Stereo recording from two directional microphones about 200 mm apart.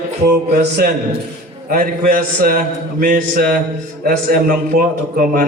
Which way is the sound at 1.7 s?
45° right (ahead or behind).